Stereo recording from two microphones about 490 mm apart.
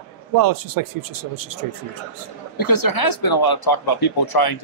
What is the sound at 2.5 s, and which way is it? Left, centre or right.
Speech, left.